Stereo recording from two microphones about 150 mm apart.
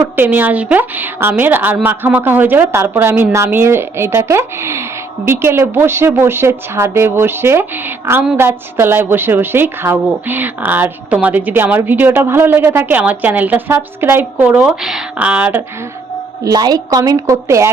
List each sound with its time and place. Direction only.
0.2 s a woman's voice: 10° right (ahead or behind)
16.4 s a woman's voice: 25° right (ahead or behind)